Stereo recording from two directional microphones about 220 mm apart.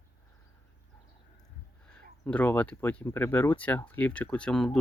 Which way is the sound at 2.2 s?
5° left (ahead or behind).